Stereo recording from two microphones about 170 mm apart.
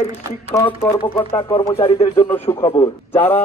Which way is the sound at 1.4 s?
30° left (ahead or behind).